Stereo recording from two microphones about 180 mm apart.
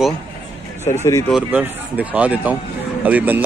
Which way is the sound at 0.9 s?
20° left (ahead or behind).